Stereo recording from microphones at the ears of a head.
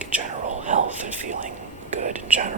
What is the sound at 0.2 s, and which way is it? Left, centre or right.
Whispering, right.